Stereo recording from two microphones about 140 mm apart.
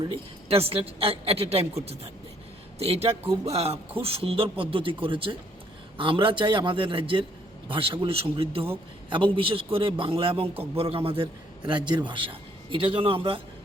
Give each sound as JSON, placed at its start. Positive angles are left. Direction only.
{"t": 0.0, "sound": "a man's voice", "side_deg": -40}